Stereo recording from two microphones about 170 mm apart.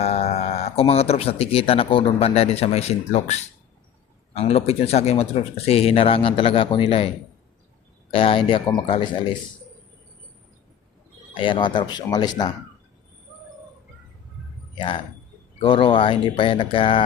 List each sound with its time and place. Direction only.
0.0 s speech: 40° left (ahead or behind)
4.4 s speech: 35° left (ahead or behind)
8.1 s speech: 30° left (ahead or behind)
11.3 s speech: 30° left (ahead or behind)
14.8 s speech: 30° left (ahead or behind)